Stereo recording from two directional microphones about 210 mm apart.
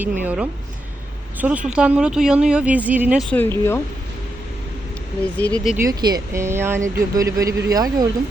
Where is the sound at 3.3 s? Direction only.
10° left (ahead or behind).